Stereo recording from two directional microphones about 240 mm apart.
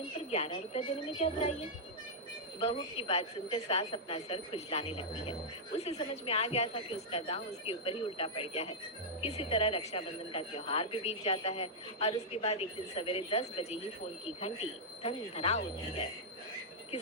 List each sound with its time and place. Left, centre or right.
0.3 s speech: left
2.6 s speech: left